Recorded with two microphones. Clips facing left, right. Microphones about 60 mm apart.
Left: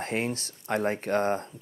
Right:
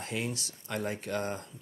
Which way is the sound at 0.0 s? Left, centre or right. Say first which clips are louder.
Left 5 dB; left.